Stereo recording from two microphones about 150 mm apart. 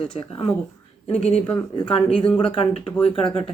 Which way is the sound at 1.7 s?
35° left (ahead or behind).